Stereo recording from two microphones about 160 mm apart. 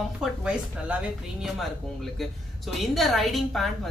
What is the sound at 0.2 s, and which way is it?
Speech, 5° right (ahead or behind).